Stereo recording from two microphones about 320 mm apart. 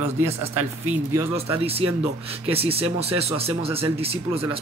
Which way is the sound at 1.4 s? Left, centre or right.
Centre.